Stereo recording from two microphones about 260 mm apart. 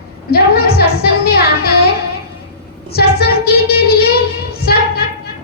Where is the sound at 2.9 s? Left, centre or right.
Left.